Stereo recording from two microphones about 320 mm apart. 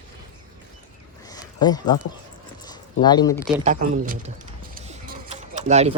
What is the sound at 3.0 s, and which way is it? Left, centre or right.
Speech, centre.